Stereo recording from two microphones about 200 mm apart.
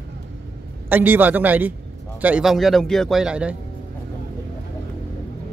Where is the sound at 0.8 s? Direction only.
10° right (ahead or behind).